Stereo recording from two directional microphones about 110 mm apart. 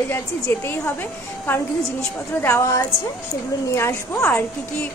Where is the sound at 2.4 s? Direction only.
25° left (ahead or behind).